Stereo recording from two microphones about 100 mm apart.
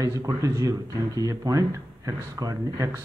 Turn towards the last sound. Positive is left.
turn(degrees=-30)  # may be behind; listen again after turning